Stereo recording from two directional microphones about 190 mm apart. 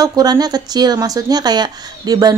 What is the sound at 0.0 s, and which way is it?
Speech, 20° right (ahead or behind).